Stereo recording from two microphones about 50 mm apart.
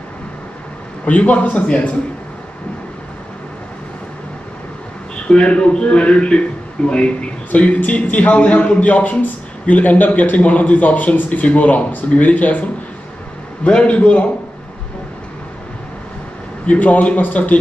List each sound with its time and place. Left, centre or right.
1.0 s a man's voice: left
5.3 s a man's voice: left
13.7 s a man's voice: left
16.6 s a man's voice: left